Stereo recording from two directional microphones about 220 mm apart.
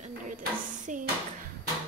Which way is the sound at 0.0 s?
35° right (ahead or behind).